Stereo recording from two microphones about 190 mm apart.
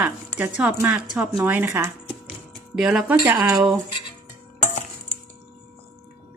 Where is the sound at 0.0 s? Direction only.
10° right (ahead or behind).